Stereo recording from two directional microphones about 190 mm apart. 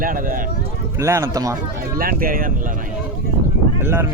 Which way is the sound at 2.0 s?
50° right (ahead or behind).